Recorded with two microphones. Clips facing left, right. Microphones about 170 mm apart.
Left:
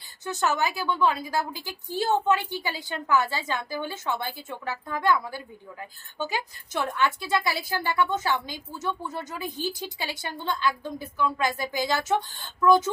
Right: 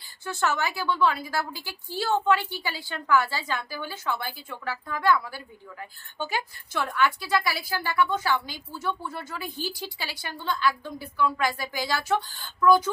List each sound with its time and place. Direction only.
0.3 s a woman's voice: 20° left (ahead or behind)